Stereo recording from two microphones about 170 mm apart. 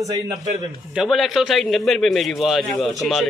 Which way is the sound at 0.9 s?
Centre (ahead or behind).